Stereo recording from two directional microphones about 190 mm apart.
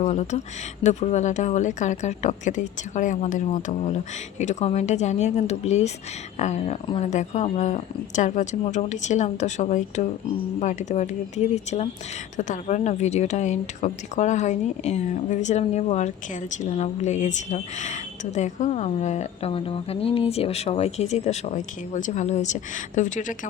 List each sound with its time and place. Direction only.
0.0 s a woman's voice: 35° left (ahead or behind)